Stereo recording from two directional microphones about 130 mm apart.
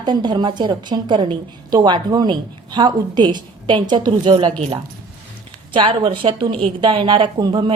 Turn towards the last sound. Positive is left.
turn(degrees=-35)  # may be behind; listen again after turning